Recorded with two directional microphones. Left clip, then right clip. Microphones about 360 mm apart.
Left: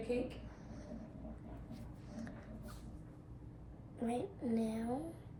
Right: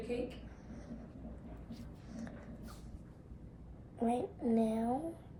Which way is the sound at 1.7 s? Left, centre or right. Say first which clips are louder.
Right 1 dB; centre.